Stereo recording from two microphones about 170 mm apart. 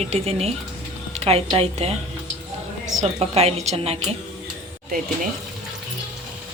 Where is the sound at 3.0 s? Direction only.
40° right (ahead or behind).